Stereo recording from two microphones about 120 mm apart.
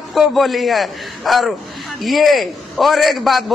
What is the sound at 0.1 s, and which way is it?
A man's voice, centre (ahead or behind).